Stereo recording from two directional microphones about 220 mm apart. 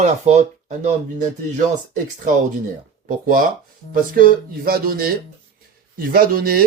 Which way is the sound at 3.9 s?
40° right (ahead or behind).